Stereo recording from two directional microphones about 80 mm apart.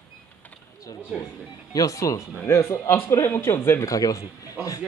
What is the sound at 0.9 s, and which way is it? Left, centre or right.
Speech, left.